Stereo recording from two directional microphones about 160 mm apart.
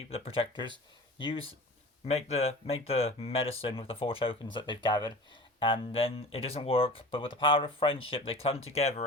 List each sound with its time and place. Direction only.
0.1 s speech: 35° left (ahead or behind)